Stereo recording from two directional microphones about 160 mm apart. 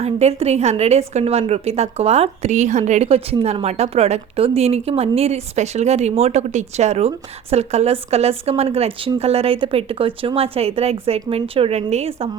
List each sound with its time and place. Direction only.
0.0 s a woman's voice: 40° right (ahead or behind)